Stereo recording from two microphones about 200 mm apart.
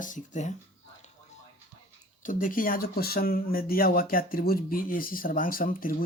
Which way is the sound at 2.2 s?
45° left (ahead or behind).